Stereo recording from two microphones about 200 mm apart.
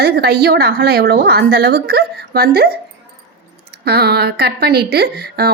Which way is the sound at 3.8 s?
55° right (ahead or behind).